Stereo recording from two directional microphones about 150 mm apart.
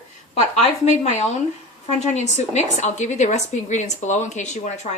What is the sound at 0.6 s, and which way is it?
A woman's voice, 50° left (ahead or behind).